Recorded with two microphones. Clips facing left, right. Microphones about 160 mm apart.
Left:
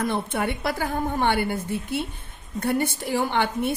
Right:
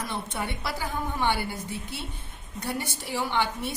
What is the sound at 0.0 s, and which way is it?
A woman's voice, 55° left (ahead or behind).